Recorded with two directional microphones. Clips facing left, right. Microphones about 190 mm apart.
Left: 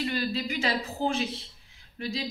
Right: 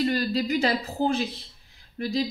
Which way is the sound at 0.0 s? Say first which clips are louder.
Right 5 dB; 40° right (ahead or behind).